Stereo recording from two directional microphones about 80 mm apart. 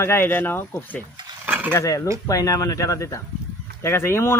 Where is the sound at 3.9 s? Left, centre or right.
Left.